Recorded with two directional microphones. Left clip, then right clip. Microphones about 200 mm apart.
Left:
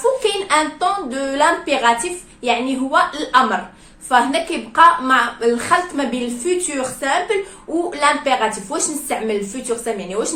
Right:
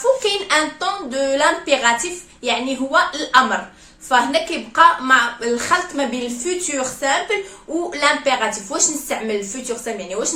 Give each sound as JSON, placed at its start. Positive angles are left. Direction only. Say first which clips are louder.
{"t": 0.2, "sound": "a woman's voice", "louder": "left 1 dB", "side_deg": -15}